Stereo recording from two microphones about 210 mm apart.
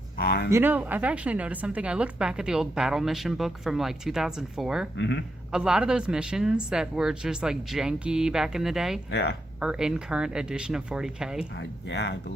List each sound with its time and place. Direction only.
0.2 s speech: 45° left (ahead or behind)
0.5 s a woman's voice: 10° right (ahead or behind)
4.9 s a man's voice: 55° left (ahead or behind)
5.5 s a woman's voice: 5° right (ahead or behind)
9.0 s speech: 55° left (ahead or behind)
9.6 s a woman's voice: 5° right (ahead or behind)
11.5 s speech: 55° left (ahead or behind)